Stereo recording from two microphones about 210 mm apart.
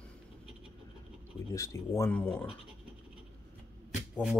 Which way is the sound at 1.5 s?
15° left (ahead or behind).